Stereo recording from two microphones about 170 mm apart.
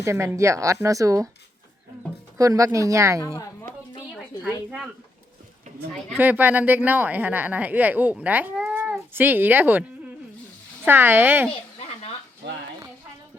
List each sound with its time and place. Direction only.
0.0 s speech: 15° right (ahead or behind)
2.4 s speech: 20° right (ahead or behind)
3.3 s a sound: 15° left (ahead or behind)
6.1 s speech: 10° right (ahead or behind)
10.8 s speech: 10° right (ahead or behind)